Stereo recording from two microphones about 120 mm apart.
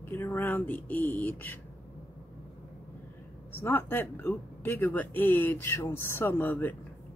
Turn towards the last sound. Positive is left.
turn(degrees=15)  # may be behind; listen again after turning